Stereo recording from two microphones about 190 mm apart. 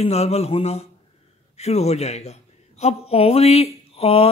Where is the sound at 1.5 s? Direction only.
35° left (ahead or behind).